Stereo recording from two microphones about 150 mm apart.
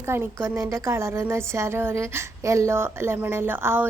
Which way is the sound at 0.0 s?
15° right (ahead or behind).